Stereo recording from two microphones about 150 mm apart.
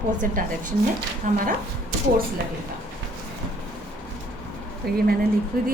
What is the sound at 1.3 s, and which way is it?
Speech, 65° right (ahead or behind).